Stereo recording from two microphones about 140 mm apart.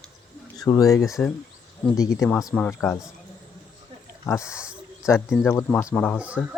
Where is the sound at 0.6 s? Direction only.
25° left (ahead or behind).